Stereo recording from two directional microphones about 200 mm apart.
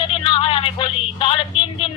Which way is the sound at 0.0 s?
25° left (ahead or behind).